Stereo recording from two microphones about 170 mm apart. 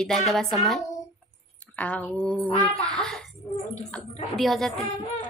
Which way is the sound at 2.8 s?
5° left (ahead or behind).